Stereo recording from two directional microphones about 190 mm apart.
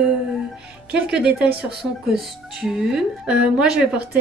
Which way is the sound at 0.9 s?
5° right (ahead or behind).